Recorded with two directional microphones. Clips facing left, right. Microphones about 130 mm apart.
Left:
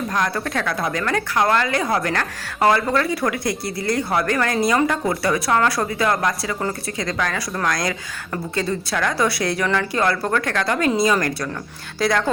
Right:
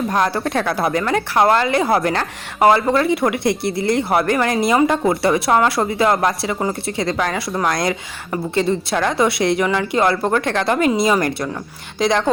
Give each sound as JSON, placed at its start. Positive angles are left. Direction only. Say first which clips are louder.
{"t": 0.1, "sound": "speech", "louder": "right 3 dB", "side_deg": -30}